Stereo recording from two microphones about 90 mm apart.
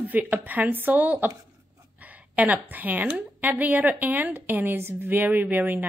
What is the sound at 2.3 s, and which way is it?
A woman's voice, 20° right (ahead or behind).